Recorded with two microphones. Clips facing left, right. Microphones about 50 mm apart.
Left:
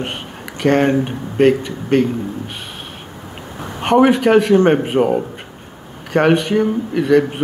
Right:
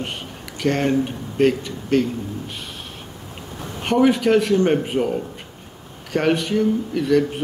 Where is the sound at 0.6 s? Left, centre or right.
Left.